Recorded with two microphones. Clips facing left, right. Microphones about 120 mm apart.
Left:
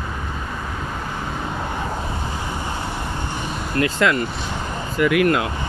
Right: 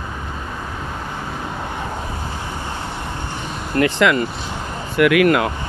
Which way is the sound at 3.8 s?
90° right.